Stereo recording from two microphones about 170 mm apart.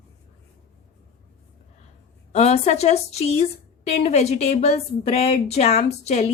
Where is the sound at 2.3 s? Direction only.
40° left (ahead or behind).